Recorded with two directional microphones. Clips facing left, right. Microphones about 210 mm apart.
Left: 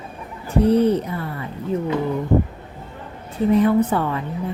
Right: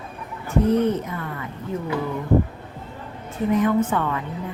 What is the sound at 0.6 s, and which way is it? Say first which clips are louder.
Speech: left 5 dB; 35° left (ahead or behind).